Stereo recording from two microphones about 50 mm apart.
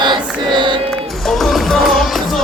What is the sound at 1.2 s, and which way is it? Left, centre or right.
Music, centre.